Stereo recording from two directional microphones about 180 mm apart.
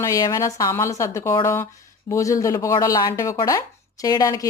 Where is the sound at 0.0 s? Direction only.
20° left (ahead or behind).